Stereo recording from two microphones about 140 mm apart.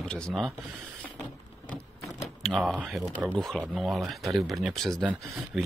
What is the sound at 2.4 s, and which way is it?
Speech, centre (ahead or behind).